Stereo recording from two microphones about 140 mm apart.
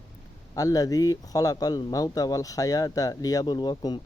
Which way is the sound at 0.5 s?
25° left (ahead or behind).